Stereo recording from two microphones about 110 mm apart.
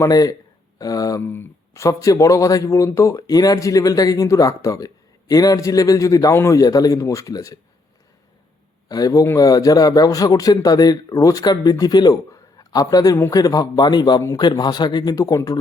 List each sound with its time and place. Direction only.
0.0 s a man's voice: 30° left (ahead or behind)
1.2 s a man's voice: 20° left (ahead or behind)
8.9 s a man's voice: 35° left (ahead or behind)
13.1 s speech: 20° left (ahead or behind)
13.4 s a man's voice: 35° left (ahead or behind)
14.2 s speech: 30° left (ahead or behind)
14.4 s a man's voice: 40° left (ahead or behind)